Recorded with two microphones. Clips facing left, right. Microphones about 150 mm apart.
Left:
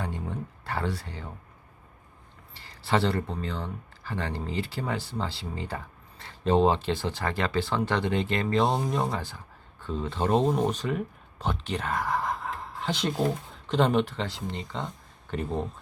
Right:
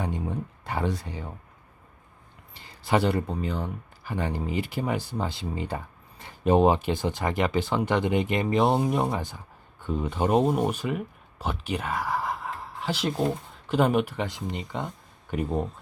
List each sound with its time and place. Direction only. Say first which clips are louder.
0.0 s speech: right 3 dB; 15° right (ahead or behind)
2.6 s speech: right 2 dB; 15° right (ahead or behind)